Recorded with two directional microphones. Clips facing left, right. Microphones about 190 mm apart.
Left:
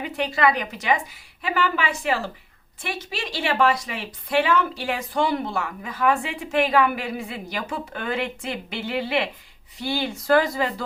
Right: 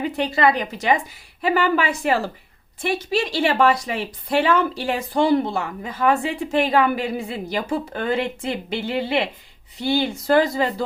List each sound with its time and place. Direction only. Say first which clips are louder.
0.0 s a woman's voice: right 3 dB; 30° right (ahead or behind)